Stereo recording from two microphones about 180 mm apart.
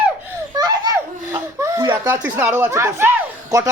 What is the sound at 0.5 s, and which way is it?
A child's voice, 20° right (ahead or behind).